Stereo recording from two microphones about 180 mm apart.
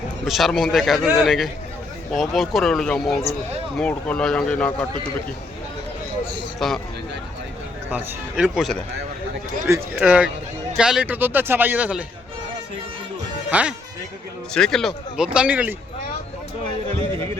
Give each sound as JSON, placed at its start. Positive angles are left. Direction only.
{"t": 0.3, "sound": "speech", "side_deg": 0}
{"t": 6.6, "sound": "speech", "side_deg": 0}
{"t": 7.9, "sound": "speech", "side_deg": -10}
{"t": 8.4, "sound": "speech", "side_deg": 0}
{"t": 9.6, "sound": "speech", "side_deg": -15}
{"t": 13.5, "sound": "speech", "side_deg": -5}